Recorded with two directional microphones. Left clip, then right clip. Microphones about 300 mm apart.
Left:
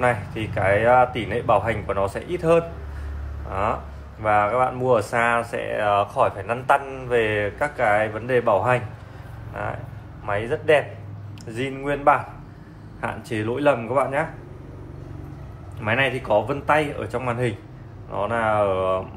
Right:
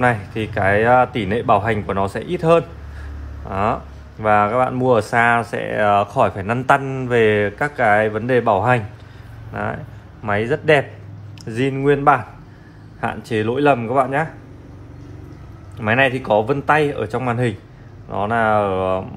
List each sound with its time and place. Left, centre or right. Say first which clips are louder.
0.0 s speech: right 4 dB; right
10.2 s speech: right 4 dB; right
15.8 s speech: right 5 dB; right